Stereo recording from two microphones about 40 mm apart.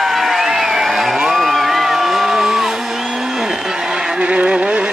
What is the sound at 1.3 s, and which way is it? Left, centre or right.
Music, centre.